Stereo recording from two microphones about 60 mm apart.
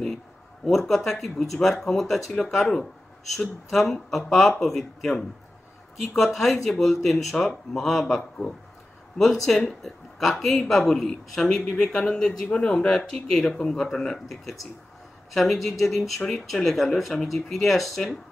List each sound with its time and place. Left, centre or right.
0.7 s speech: centre
9.2 s speech: centre